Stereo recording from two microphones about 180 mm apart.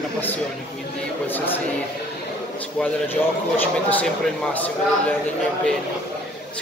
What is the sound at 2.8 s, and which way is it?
Speech, 10° left (ahead or behind).